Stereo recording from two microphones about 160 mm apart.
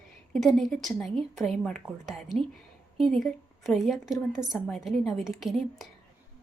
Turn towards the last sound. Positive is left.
turn(degrees=0)  # may be behind; listen again after turning